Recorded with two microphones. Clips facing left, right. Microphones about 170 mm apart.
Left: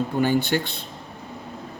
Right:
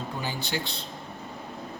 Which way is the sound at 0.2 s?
60° left (ahead or behind).